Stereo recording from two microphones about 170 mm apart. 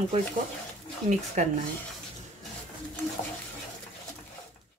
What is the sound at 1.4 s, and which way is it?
Speech, 40° right (ahead or behind).